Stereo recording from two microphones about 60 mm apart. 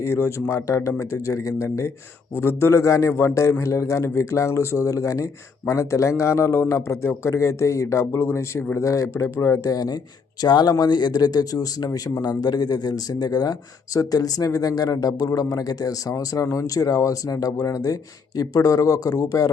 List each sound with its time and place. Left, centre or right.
0.1 s a man's voice: left
2.3 s a man's voice: left
8.8 s a man's voice: left
9.6 s speech: left